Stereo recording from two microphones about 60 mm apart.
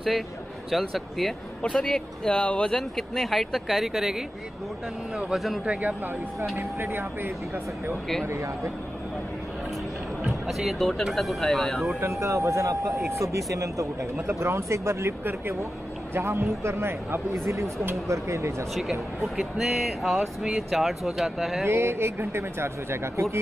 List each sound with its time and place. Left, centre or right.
0.7 s speech: centre
1.8 s speech: centre
3.0 s speech: centre
5.3 s speech: centre
5.7 s speech: right
6.5 s speech: right
8.3 s speech: right
10.2 s speech: centre
12.0 s a man's voice: right
14.1 s speech: right
18.8 s speech: centre
21.6 s speech: right